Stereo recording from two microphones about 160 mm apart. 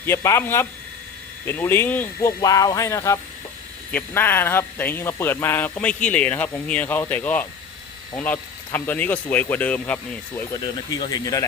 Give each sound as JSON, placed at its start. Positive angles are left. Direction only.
{"t": 0.0, "sound": "speech", "side_deg": 15}
{"t": 2.4, "sound": "speech", "side_deg": 25}
{"t": 10.5, "sound": "speech", "side_deg": 25}